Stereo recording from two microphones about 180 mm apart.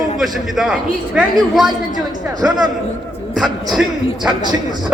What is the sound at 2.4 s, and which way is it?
A woman's voice, 10° right (ahead or behind).